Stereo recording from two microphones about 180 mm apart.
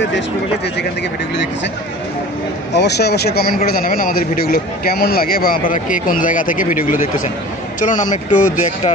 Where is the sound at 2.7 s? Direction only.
70° left (ahead or behind).